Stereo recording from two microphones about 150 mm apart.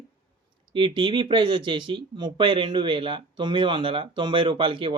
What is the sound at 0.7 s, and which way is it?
Speech, 35° right (ahead or behind).